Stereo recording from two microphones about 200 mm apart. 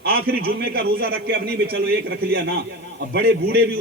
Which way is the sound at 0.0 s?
50° right (ahead or behind).